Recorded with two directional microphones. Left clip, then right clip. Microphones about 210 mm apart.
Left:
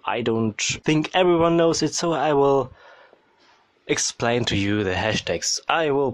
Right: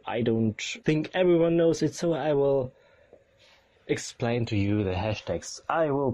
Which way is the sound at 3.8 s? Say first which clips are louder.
Left 7 dB; 20° left (ahead or behind).